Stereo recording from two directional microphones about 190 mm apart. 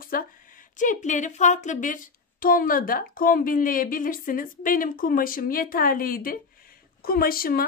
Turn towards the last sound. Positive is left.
turn(degrees=50)  # may be behind; listen again after turning